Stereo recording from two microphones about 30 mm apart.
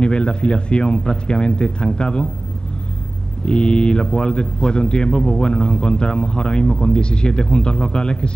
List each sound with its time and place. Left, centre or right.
0.0 s a man's voice: left
3.4 s a man's voice: left